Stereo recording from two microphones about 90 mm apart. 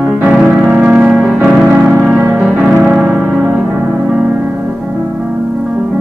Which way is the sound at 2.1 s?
30° right (ahead or behind).